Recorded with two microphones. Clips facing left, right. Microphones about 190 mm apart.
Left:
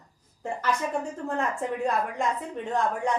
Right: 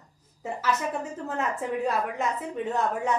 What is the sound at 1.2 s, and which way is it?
A woman's voice, 5° right (ahead or behind).